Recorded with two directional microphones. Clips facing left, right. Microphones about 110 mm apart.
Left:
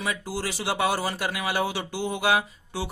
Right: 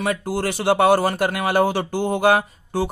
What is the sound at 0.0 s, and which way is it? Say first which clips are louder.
Speech: right 7 dB; 55° right (ahead or behind).